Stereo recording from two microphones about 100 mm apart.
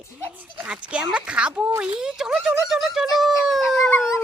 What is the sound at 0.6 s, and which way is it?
Speech, 10° right (ahead or behind).